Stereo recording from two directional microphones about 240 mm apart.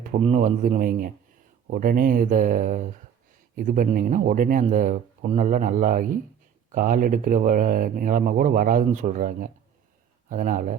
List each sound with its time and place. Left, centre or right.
0.0 s speech: right